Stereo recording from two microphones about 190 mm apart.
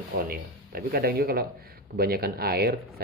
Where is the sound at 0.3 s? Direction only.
50° right (ahead or behind).